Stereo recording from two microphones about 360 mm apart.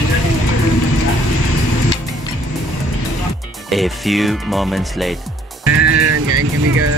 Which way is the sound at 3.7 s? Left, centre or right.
Centre.